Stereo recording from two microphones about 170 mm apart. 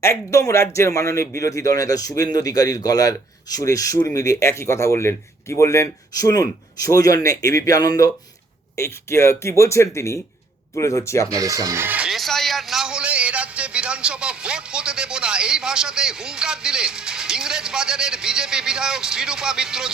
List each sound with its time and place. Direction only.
0.0 s a man's voice: 15° left (ahead or behind)
11.3 s speech: 20° right (ahead or behind); by 19.9 s 5° right (ahead or behind)